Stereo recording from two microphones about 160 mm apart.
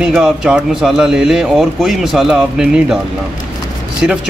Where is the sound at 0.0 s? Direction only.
5° right (ahead or behind).